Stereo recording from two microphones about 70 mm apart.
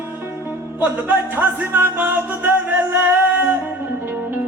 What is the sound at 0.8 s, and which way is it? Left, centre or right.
Music, right.